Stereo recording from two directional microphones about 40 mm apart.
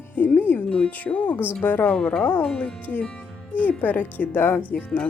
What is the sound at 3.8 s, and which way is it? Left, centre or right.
Speech, left.